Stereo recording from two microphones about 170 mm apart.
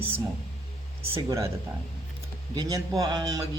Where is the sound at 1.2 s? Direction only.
20° right (ahead or behind).